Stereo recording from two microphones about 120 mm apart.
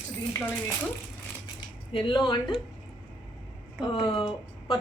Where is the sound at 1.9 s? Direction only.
45° left (ahead or behind).